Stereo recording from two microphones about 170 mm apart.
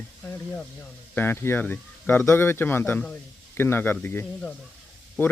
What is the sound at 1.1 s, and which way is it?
Speech, 15° left (ahead or behind).